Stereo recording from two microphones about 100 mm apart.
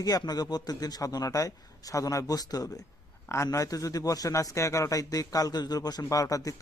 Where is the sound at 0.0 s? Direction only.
40° left (ahead or behind).